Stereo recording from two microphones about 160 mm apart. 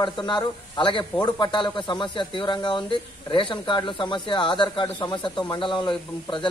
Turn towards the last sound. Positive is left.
turn(degrees=30)  # may be behind; listen again after turning